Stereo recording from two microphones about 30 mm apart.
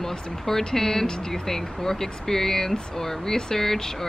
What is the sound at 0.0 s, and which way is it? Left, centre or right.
Speech, centre.